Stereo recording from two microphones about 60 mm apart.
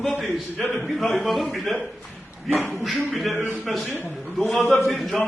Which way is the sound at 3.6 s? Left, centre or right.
Centre.